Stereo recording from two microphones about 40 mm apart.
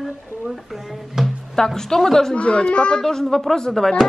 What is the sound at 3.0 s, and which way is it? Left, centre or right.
Speech, centre.